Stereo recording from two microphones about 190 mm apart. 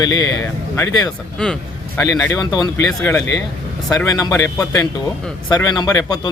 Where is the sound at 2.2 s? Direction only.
20° left (ahead or behind).